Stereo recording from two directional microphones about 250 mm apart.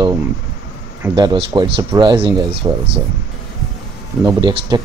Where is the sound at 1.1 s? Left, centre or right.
Centre.